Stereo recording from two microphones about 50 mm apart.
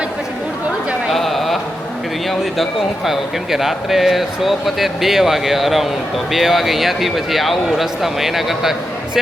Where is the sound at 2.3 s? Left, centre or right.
Centre.